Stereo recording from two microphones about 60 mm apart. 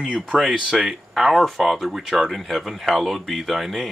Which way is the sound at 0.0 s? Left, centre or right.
Centre.